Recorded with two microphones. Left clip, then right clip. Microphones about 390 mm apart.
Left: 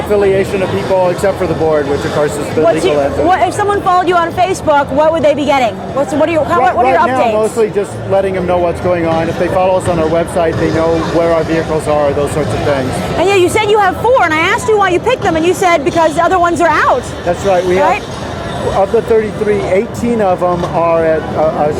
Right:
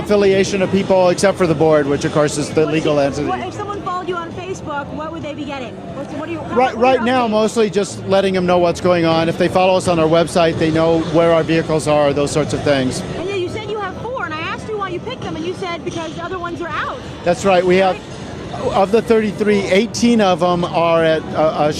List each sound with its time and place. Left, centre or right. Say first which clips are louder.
0.1 s a man's voice: left 2 dB; right
3.3 s speech: left 12 dB; centre
6.8 s a man's voice: left 4 dB; right
13.2 s speech: left 14 dB; centre
17.2 s a man's voice: left 1 dB; right